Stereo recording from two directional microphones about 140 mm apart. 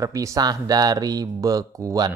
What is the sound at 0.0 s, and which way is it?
A woman's voice, 25° right (ahead or behind).